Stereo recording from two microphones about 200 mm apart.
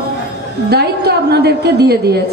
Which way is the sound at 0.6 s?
55° right (ahead or behind).